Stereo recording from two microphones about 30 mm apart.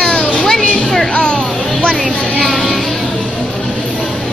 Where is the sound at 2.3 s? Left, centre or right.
Centre.